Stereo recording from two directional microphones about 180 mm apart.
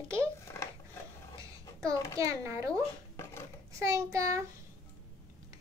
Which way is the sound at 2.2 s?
15° right (ahead or behind).